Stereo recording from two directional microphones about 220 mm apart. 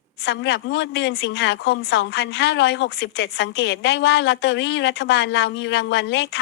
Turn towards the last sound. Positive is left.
turn(degrees=50)  # may be behind; listen again after turning